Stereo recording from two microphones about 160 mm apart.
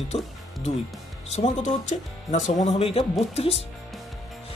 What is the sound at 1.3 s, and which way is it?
Speech, 45° left (ahead or behind).